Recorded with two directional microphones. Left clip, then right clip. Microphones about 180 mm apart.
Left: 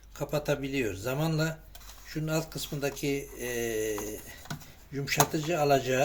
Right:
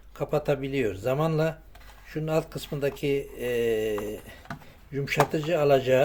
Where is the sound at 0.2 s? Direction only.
40° right (ahead or behind).